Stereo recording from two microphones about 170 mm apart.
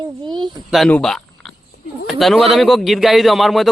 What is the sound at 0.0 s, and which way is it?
Speech, 25° right (ahead or behind).